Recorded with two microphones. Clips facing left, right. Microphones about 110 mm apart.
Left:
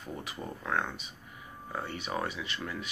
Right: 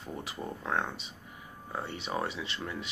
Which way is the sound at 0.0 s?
30° right (ahead or behind).